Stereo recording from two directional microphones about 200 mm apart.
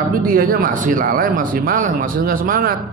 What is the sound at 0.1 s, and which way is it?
A man's voice, 45° right (ahead or behind).